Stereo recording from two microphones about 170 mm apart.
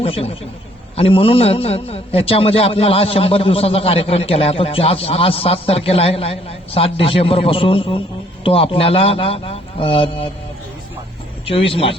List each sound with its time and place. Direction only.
0.0 s a man's voice: 35° left (ahead or behind)
11.4 s a man's voice: 30° left (ahead or behind)